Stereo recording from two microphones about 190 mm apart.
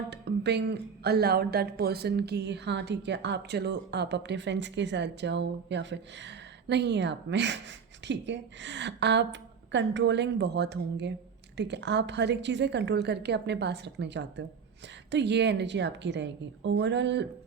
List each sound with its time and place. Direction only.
0.1 s a woman's voice: 60° right (ahead or behind)